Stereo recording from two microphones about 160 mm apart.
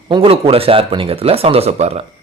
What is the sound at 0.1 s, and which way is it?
A man's voice, 35° right (ahead or behind).